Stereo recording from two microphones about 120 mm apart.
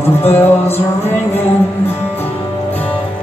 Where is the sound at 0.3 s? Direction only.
20° left (ahead or behind).